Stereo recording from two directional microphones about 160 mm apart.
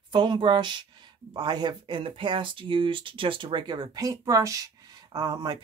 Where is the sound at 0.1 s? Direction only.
30° right (ahead or behind).